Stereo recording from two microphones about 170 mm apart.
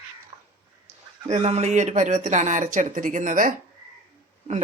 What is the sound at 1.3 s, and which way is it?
Speech, 40° right (ahead or behind).